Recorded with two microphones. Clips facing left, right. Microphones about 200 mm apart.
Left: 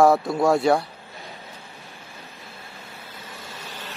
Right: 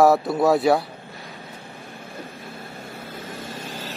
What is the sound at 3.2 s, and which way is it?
Vehicle, 50° right (ahead or behind).